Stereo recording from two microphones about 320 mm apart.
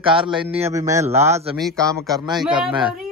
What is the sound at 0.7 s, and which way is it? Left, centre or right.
A man's voice, centre.